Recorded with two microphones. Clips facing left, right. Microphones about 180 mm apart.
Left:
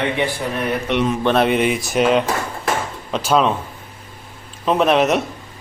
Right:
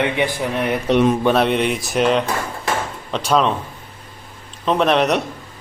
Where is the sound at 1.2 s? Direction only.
Centre (ahead or behind).